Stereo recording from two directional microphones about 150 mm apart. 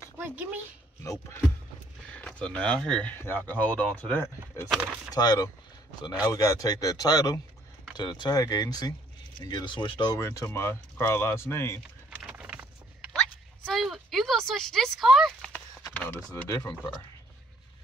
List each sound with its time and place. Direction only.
0.2 s speech: 10° right (ahead or behind)
1.0 s speech: 20° left (ahead or behind)
2.0 s speech: 10° left (ahead or behind)
4.6 s speech: 5° right (ahead or behind)
5.1 s speech: 25° left (ahead or behind)
12.2 s a sound: 10° right (ahead or behind)
15.8 s speech: 10° left (ahead or behind)